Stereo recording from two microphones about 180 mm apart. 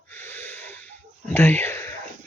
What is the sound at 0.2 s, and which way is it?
Wheeze, 10° left (ahead or behind).